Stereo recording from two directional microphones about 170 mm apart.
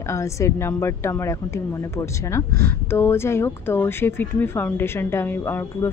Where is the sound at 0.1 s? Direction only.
15° left (ahead or behind).